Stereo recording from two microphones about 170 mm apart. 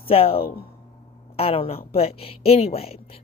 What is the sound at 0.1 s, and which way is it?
Speech, 35° left (ahead or behind).